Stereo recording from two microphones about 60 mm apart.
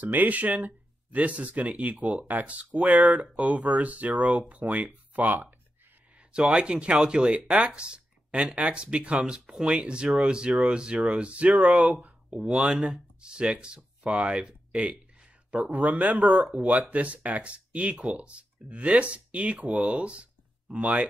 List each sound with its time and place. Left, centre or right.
0.0 s speech: right
6.3 s speech: centre
12.4 s speech: centre